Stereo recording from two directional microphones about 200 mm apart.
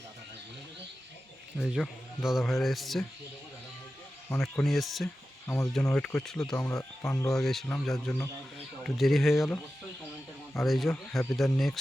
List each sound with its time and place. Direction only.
1.5 s a man's voice: centre (ahead or behind)
4.3 s a man's voice: 5° left (ahead or behind)
5.5 s a man's voice: 15° left (ahead or behind)
7.3 s a man's voice: centre (ahead or behind)